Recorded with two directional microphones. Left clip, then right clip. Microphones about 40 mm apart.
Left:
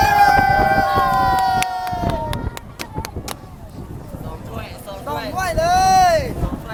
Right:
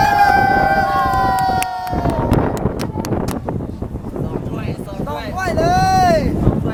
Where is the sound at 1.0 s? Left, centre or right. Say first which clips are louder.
Even; right.